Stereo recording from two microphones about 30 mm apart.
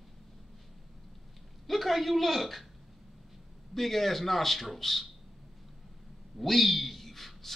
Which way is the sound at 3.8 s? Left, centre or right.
Centre.